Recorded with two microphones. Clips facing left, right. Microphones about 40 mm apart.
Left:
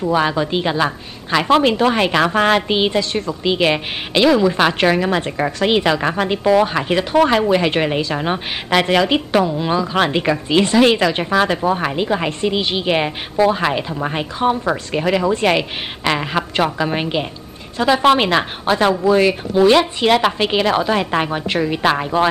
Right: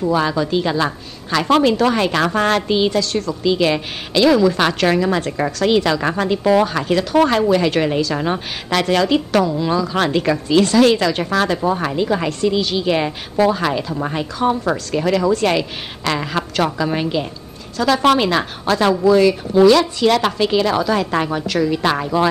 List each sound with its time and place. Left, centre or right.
0.1 s a woman's voice: left
4.6 s a woman's voice: centre
9.3 s a woman's voice: centre